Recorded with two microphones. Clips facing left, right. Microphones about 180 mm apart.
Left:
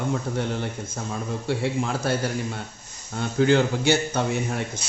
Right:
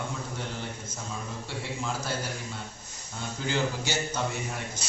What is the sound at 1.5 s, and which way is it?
A man's voice, 60° left (ahead or behind).